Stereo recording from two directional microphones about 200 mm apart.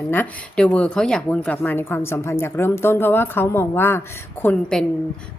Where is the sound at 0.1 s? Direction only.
5° left (ahead or behind).